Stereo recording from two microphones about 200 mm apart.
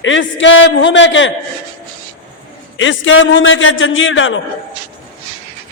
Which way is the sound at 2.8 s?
70° left (ahead or behind).